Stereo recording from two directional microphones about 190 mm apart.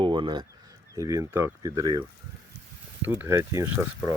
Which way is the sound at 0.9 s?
15° right (ahead or behind).